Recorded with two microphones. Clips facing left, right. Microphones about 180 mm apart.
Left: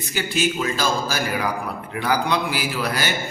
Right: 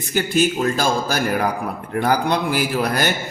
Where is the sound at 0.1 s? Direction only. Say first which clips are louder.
Right 5 dB; 50° right (ahead or behind).